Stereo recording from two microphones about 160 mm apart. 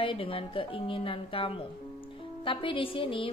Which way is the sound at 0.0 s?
35° left (ahead or behind).